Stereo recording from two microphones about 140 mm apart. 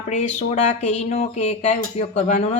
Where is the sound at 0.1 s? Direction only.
55° left (ahead or behind).